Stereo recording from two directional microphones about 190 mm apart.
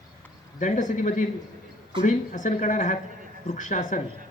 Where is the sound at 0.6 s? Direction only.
40° left (ahead or behind).